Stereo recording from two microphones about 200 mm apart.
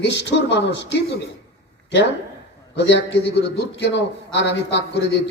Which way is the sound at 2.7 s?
60° left (ahead or behind).